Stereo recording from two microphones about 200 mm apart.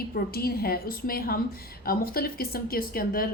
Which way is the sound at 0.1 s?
50° left (ahead or behind).